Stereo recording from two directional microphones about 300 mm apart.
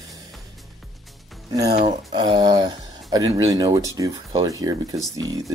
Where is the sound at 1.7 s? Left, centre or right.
Centre.